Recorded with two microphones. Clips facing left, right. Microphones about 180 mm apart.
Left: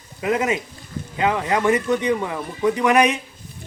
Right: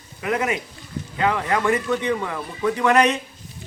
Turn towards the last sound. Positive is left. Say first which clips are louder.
# left 1 dB
turn(degrees=15)  # may be behind; listen again after turning